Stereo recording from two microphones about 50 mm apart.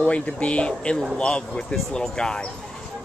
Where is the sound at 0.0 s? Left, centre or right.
Left.